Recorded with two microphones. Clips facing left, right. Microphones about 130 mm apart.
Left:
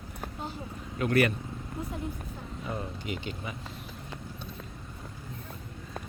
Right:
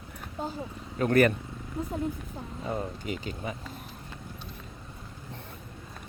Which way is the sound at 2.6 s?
25° right (ahead or behind).